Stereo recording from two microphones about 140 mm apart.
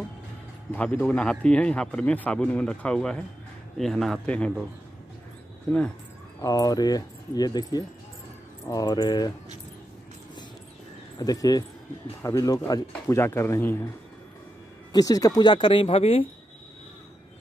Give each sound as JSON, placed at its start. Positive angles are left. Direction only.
{"t": 0.7, "sound": "speech", "side_deg": 10}
{"t": 6.4, "sound": "speech", "side_deg": 25}
{"t": 11.1, "sound": "speech", "side_deg": 25}
{"t": 14.9, "sound": "speech", "side_deg": 25}